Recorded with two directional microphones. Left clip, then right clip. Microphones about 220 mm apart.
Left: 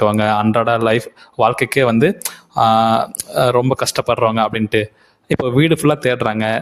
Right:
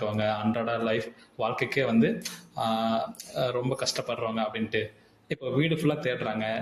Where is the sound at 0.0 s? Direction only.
45° left (ahead or behind).